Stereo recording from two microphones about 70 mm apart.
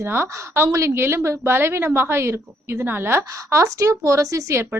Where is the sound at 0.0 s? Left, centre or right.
Right.